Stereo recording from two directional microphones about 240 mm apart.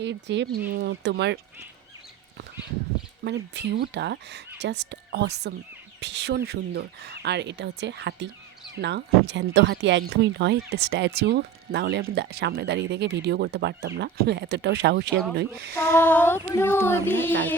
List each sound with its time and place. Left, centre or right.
0.0 s speech: right
3.2 s a woman's voice: right
15.9 s child singing: centre